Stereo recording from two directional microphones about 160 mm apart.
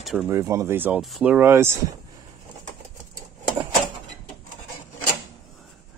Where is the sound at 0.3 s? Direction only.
20° right (ahead or behind).